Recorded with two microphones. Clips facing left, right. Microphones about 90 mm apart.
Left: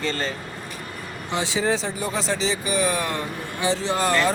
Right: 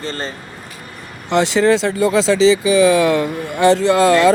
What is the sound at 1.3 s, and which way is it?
Speech, 75° right (ahead or behind).